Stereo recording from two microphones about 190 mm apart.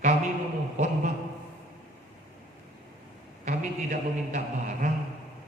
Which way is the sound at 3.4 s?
40° right (ahead or behind).